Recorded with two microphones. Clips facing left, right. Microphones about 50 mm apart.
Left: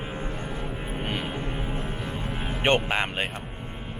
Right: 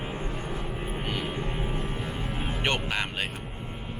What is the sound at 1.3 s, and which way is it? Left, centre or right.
Music, centre.